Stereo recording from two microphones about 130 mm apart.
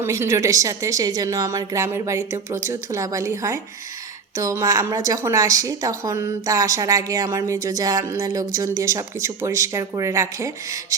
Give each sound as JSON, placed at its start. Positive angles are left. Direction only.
{"t": 0.0, "sound": "a woman's voice", "side_deg": -20}